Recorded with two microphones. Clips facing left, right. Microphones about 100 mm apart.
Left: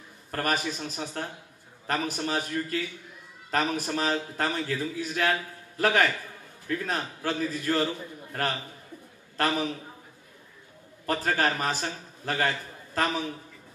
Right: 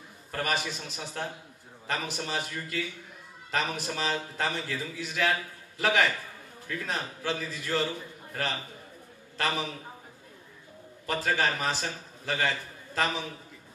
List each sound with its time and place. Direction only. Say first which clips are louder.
0.3 s a man's voice: left 2 dB; 45° left (ahead or behind)
11.1 s a man's voice: left 2 dB; 45° left (ahead or behind)